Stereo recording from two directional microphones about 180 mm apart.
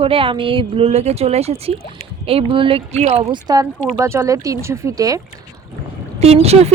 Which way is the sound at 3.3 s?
20° right (ahead or behind).